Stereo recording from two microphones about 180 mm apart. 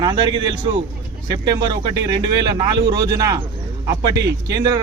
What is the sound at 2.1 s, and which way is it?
A man's voice, 25° right (ahead or behind).